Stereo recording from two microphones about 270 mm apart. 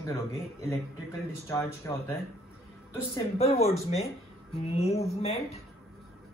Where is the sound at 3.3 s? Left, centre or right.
Left.